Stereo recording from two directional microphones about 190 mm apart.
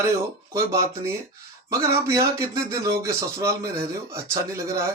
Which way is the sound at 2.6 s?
15° right (ahead or behind).